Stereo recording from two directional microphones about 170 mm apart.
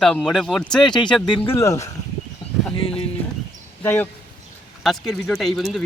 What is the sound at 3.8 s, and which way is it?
Speech, 10° left (ahead or behind).